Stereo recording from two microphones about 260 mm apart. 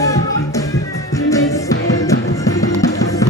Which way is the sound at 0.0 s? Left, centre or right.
Centre.